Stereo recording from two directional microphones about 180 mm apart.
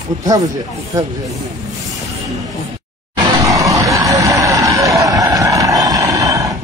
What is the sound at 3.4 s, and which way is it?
Vehicle, 15° right (ahead or behind).